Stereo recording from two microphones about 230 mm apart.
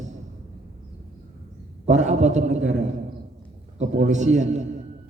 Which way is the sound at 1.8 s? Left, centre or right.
Right.